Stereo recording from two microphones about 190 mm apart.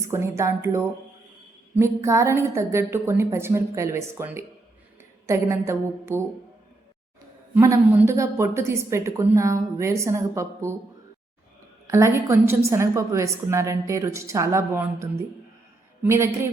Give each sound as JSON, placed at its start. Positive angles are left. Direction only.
{"t": 0.0, "sound": "a woman's voice", "side_deg": -15}
{"t": 7.5, "sound": "a woman's voice", "side_deg": -15}
{"t": 11.9, "sound": "a woman's voice", "side_deg": -15}